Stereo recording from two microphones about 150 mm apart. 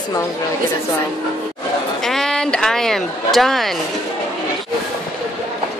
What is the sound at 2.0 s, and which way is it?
Speech, 5° left (ahead or behind).